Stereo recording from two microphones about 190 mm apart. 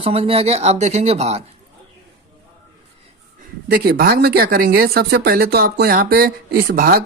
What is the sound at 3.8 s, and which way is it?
Speech, 55° right (ahead or behind).